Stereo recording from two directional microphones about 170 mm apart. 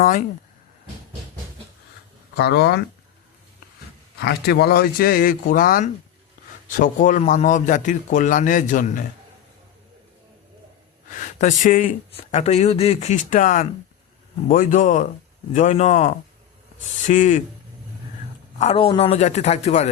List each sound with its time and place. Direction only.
0.0 s a man's voice: 50° left (ahead or behind)
2.3 s speech: 70° left (ahead or behind)
4.2 s a man's voice: 75° left (ahead or behind); by 9.0 s 50° left (ahead or behind)
11.2 s speech: 50° left (ahead or behind)
12.1 s a man's voice: 40° left (ahead or behind)
18.6 s speech: 35° left (ahead or behind)